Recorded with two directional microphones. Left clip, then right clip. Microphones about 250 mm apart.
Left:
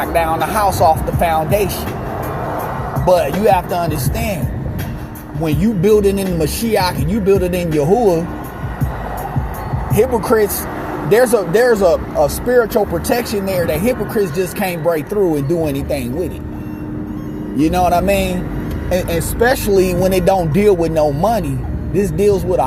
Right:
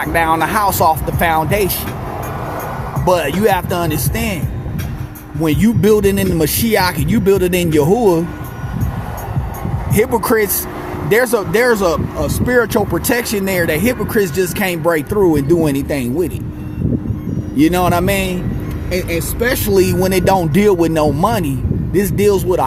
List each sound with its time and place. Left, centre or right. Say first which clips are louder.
0.0 s speech: right 1 dB; right
3.1 s speech: left 1 dB; right
5.4 s speech: right 2 dB; right
9.9 s speech: even; right
17.6 s speech: even; right
19.6 s speech: even; right